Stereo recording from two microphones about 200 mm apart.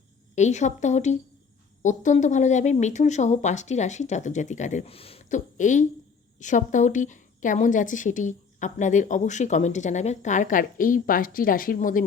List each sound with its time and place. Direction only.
0.3 s a woman's voice: 35° left (ahead or behind)